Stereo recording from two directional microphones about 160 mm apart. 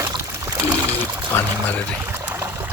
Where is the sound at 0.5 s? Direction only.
10° right (ahead or behind).